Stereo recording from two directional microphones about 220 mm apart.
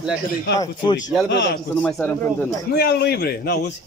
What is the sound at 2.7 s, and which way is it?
Speech, 50° left (ahead or behind).